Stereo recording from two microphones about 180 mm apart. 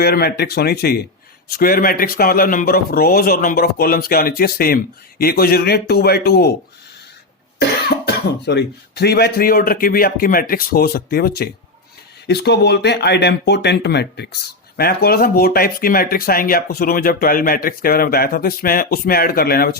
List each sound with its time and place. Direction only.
0.0 s speech: 60° left (ahead or behind)
7.9 s speech: 65° left (ahead or behind)